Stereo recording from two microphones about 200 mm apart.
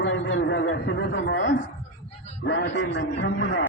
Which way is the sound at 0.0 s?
70° left (ahead or behind).